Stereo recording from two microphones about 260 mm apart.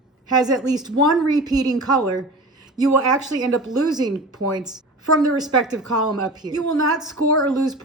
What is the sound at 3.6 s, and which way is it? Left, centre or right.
Speech, centre.